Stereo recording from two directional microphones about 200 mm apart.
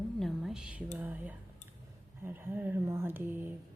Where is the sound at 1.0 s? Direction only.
10° right (ahead or behind).